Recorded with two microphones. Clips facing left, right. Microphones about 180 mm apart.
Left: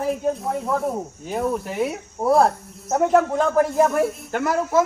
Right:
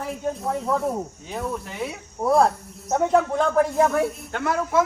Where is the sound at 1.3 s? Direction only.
55° left (ahead or behind).